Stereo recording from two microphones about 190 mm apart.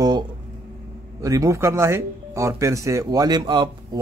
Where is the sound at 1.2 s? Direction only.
15° right (ahead or behind).